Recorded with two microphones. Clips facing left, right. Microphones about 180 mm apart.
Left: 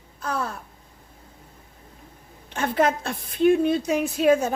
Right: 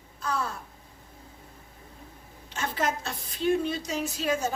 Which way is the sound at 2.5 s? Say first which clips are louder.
Left 8 dB; 55° left (ahead or behind).